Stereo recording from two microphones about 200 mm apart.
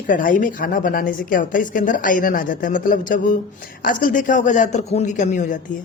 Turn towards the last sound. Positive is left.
turn(degrees=40)  # may be behind; listen again after turning